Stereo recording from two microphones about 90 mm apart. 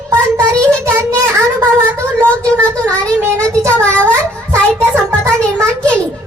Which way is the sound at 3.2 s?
30° right (ahead or behind).